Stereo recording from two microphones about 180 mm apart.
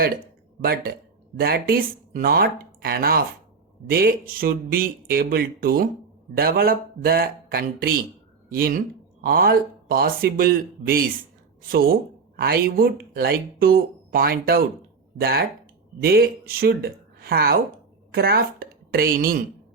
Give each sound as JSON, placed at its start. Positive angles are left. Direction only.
{"t": 0.6, "sound": "a woman's voice", "side_deg": -60}